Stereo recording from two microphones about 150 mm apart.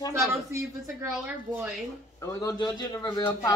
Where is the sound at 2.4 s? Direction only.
25° left (ahead or behind).